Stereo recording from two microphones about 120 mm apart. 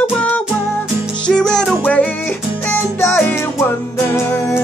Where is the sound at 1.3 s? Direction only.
5° left (ahead or behind).